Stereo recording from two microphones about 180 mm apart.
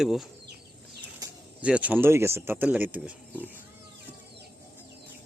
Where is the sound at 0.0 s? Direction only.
Centre (ahead or behind).